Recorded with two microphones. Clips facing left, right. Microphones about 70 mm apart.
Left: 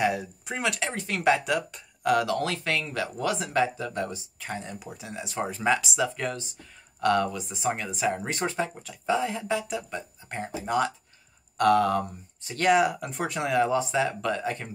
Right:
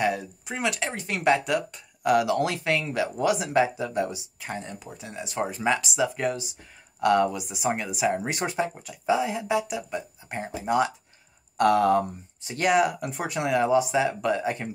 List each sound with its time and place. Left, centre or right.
0.0 s speech: centre
12.6 s speech: centre